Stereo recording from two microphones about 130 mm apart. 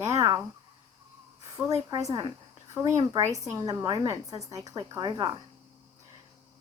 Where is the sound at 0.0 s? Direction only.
25° right (ahead or behind).